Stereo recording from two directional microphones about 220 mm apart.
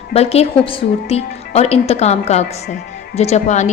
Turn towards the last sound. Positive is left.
turn(degrees=30)  # may be behind; listen again after turning